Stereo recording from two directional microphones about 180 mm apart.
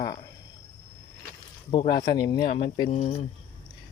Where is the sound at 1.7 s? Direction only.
25° left (ahead or behind).